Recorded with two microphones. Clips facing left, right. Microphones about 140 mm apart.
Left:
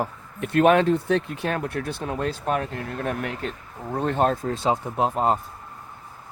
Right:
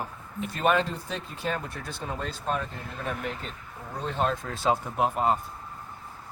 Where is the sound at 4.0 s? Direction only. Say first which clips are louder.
Left 6 dB; 55° left (ahead or behind).